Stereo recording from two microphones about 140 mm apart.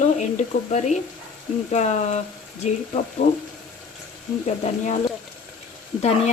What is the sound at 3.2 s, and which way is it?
Speech, 60° left (ahead or behind).